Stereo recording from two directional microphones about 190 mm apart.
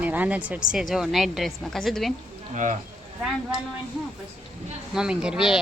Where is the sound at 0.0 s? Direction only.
10° right (ahead or behind).